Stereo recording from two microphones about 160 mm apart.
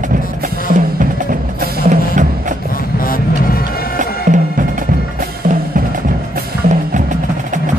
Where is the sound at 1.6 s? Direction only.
55° right (ahead or behind).